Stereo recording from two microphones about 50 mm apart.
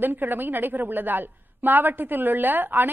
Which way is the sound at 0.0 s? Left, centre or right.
Right.